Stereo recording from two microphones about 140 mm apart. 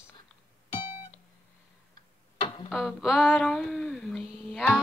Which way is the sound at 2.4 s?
35° left (ahead or behind).